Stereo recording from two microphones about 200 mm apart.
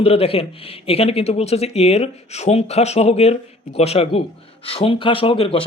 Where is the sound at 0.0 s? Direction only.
30° left (ahead or behind).